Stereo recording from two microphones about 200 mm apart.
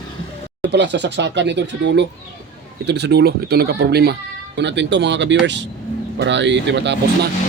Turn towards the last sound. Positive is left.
turn(degrees=-60)  # may be behind; listen again after turning